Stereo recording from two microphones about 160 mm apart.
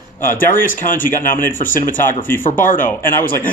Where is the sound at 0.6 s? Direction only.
55° left (ahead or behind).